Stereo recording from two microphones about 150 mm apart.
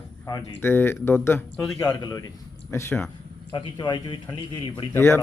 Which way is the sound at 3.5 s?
30° left (ahead or behind).